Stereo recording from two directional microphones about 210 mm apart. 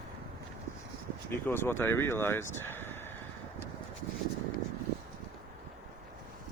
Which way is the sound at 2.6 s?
10° left (ahead or behind).